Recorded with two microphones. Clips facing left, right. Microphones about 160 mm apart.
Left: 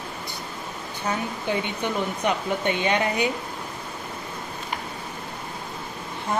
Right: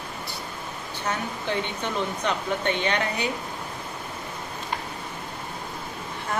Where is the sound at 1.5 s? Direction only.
15° left (ahead or behind).